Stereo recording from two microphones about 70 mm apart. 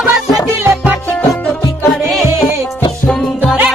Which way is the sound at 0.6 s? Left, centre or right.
Right.